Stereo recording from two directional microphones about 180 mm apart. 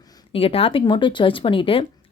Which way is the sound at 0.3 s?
30° left (ahead or behind).